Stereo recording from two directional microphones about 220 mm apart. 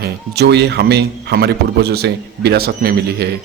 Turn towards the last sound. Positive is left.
turn(degrees=-45)  # may be behind; listen again after turning